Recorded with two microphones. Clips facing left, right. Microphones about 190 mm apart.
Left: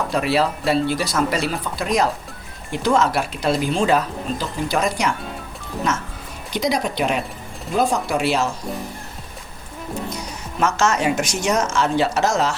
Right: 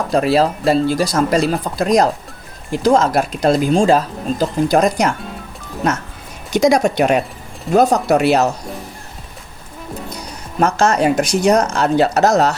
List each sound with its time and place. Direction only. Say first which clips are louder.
0.1 s speech: right 7 dB; 40° right (ahead or behind)
6.7 s speech: right 7 dB; 45° right (ahead or behind)
10.1 s speech: even; 35° right (ahead or behind)